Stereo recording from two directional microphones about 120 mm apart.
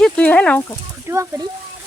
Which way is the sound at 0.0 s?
10° left (ahead or behind).